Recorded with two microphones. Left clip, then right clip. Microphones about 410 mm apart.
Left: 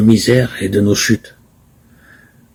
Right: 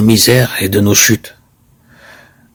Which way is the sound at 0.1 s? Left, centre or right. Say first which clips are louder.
Right 4 dB; right.